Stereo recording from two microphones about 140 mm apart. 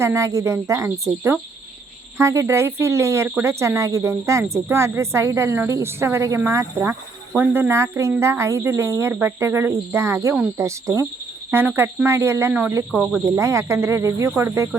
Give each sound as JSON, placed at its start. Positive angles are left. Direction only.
{"t": 0.0, "sound": "speech", "side_deg": -20}
{"t": 13.2, "sound": "speech", "side_deg": -20}